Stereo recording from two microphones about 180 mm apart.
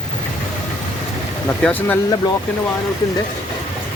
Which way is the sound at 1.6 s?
10° left (ahead or behind).